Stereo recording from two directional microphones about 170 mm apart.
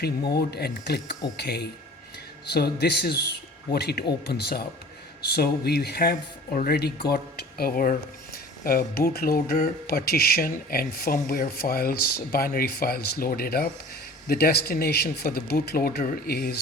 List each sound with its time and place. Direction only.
0.3 s speech: 70° left (ahead or behind)